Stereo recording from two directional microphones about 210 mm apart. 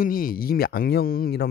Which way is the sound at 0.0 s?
40° left (ahead or behind).